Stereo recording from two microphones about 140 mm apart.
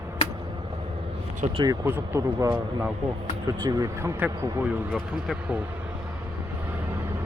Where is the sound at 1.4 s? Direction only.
50° right (ahead or behind).